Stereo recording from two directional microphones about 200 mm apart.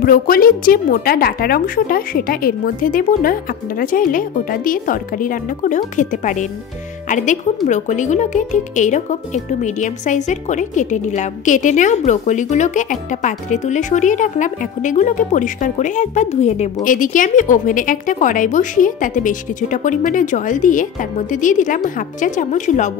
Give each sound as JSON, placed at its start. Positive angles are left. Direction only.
{"t": 0.0, "sound": "a woman's voice", "side_deg": 45}